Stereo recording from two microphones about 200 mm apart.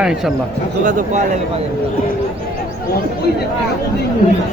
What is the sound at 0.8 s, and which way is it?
Speech, 40° right (ahead or behind).